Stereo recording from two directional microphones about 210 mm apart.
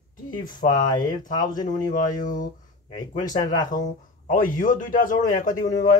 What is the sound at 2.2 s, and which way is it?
Speech, 40° left (ahead or behind).